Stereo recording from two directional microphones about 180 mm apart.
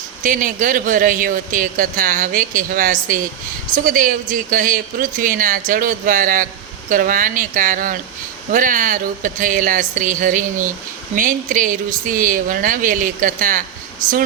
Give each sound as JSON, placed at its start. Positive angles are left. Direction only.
{"t": 0.2, "sound": "speech", "side_deg": -50}